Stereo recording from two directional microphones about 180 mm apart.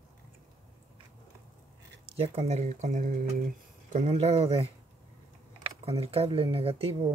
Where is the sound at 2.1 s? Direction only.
35° right (ahead or behind).